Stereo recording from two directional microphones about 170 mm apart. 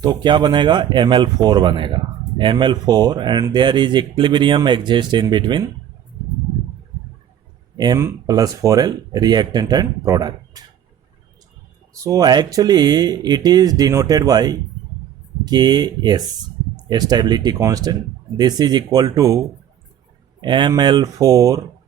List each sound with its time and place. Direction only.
0.0 s speech: 25° right (ahead or behind)
7.8 s speech: 20° right (ahead or behind)
12.0 s speech: 20° right (ahead or behind)